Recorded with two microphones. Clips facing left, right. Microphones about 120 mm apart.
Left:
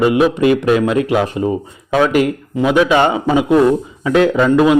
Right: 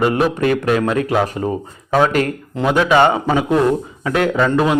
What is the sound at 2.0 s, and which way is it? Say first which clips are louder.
Speech: left 2 dB; 10° left (ahead or behind).